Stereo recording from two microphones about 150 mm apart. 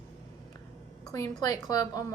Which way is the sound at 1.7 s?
25° left (ahead or behind).